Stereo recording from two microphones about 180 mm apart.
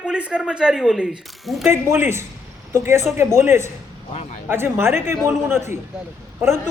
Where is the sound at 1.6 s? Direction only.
10° right (ahead or behind).